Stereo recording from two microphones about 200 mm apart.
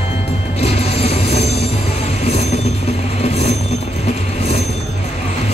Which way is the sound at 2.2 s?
30° left (ahead or behind).